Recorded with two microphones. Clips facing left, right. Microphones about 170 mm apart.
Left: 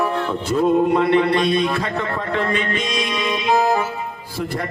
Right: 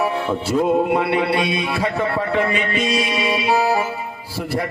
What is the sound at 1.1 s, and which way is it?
Mantra, 10° right (ahead or behind).